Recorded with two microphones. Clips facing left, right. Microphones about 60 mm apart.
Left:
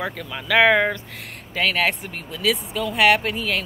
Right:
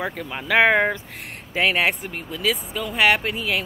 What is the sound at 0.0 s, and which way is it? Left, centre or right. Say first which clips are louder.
Speech: right 1 dB; right.